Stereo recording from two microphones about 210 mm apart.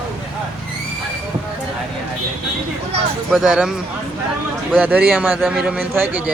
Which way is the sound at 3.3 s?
5° right (ahead or behind).